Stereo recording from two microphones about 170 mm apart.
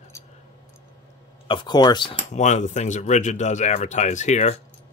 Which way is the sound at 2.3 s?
45° left (ahead or behind).